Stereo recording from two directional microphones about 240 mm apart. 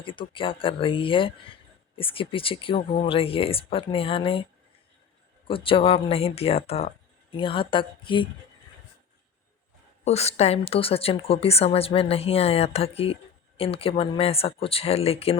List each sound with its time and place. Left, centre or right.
0.0 s a woman's voice: left
5.5 s a woman's voice: left
10.0 s a woman's voice: left